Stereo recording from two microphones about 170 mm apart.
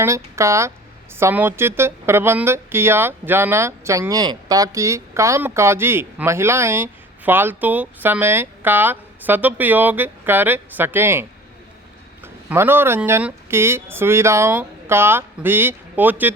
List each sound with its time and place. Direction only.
0.0 s speech: 15° right (ahead or behind)